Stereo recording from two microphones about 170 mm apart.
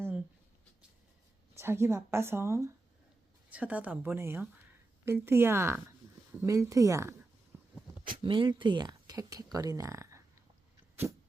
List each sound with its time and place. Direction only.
1.5 s speech: 15° right (ahead or behind)
8.2 s speech: 30° right (ahead or behind)